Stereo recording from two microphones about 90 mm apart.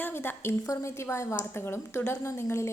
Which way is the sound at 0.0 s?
25° left (ahead or behind).